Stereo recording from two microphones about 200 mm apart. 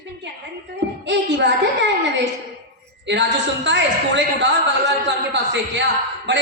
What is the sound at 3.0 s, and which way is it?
A woman's voice, 60° right (ahead or behind).